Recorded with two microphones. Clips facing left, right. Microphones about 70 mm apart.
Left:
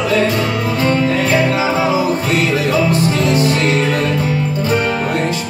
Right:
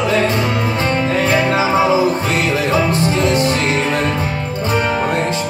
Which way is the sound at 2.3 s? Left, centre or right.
Right.